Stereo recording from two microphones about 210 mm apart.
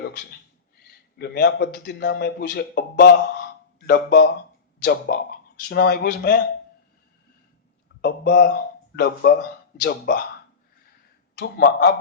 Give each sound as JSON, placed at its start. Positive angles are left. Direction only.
{"t": 0.0, "sound": "a sound", "side_deg": 55}
{"t": 1.2, "sound": "speech", "side_deg": 50}
{"t": 8.0, "sound": "speech", "side_deg": 50}
{"t": 11.3, "sound": "speech", "side_deg": 50}